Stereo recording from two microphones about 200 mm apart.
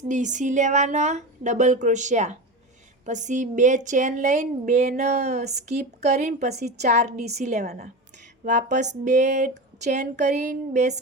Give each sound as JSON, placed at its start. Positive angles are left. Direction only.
{"t": 0.1, "sound": "speech", "side_deg": -40}